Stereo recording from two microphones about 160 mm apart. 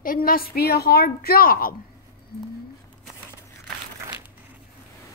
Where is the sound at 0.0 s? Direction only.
65° left (ahead or behind).